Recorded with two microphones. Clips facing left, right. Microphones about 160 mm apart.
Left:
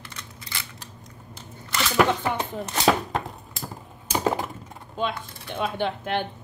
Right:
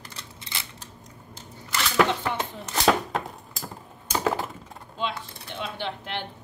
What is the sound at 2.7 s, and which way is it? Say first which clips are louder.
Chopping: even; centre (ahead or behind).